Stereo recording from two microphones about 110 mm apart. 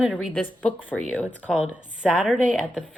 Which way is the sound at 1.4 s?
15° right (ahead or behind).